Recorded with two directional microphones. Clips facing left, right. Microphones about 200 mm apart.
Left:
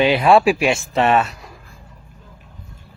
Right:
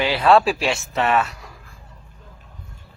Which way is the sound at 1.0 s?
25° left (ahead or behind).